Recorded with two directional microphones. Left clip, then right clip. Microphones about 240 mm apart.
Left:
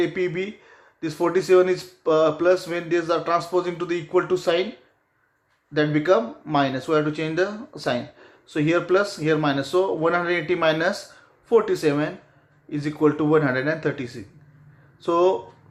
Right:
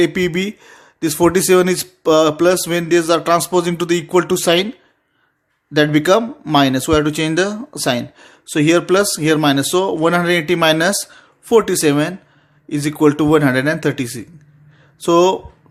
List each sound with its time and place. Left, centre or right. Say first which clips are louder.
0.0 s speech: right 7 dB; right
5.7 s speech: right 7 dB; right